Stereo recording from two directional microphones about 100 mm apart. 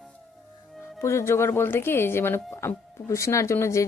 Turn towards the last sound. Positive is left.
turn(degrees=30)  # may be behind; listen again after turning